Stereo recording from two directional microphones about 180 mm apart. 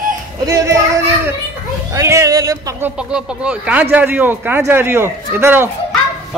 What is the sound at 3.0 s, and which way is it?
A man's voice, 5° right (ahead or behind).